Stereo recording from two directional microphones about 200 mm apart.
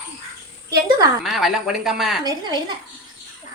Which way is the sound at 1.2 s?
Centre (ahead or behind).